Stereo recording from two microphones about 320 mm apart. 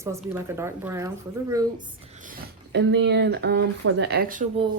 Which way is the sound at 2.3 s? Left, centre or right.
Right.